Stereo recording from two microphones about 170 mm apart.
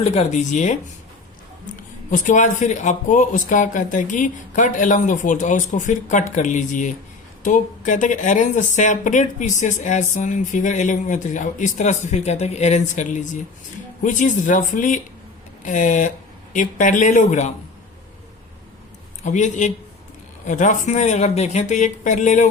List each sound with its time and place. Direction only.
0.0 s speech: 40° left (ahead or behind)
2.0 s speech: 50° left (ahead or behind)
19.2 s speech: 45° left (ahead or behind)